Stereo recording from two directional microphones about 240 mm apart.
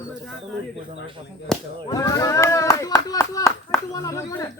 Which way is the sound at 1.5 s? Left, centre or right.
Centre.